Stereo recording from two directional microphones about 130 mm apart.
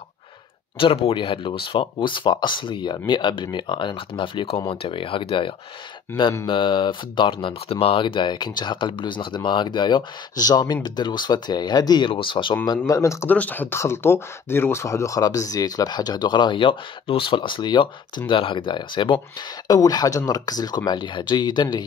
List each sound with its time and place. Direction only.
0.7 s speech: 40° left (ahead or behind)
12.8 s speech: 25° left (ahead or behind)
13.3 s speech: 15° left (ahead or behind); by 21.8 s 35° left (ahead or behind)